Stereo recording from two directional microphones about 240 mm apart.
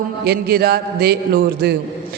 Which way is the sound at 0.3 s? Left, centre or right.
Right.